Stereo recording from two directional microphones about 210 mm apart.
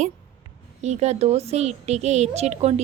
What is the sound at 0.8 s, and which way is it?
A woman's voice, 30° right (ahead or behind).